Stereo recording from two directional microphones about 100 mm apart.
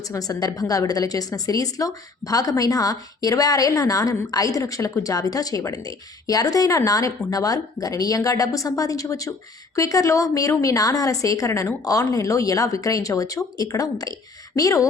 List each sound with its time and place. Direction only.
0.1 s a woman's voice: 40° left (ahead or behind)